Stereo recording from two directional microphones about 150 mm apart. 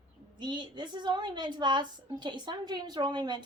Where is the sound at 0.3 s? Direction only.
30° right (ahead or behind).